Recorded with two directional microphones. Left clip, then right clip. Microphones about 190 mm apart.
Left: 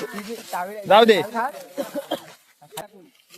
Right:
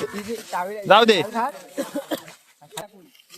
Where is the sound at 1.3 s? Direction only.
60° right (ahead or behind).